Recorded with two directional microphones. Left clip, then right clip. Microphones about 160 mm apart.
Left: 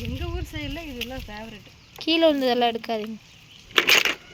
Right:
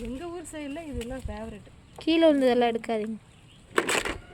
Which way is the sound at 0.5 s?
20° right (ahead or behind).